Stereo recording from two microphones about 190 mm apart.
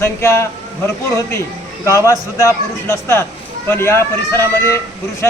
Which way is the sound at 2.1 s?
15° left (ahead or behind).